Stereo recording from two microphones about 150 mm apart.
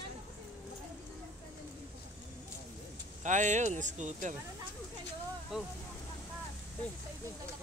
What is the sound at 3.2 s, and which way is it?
Speech, 55° right (ahead or behind).